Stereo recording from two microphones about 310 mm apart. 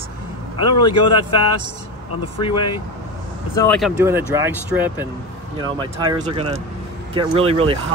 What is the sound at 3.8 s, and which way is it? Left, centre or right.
Speech, centre.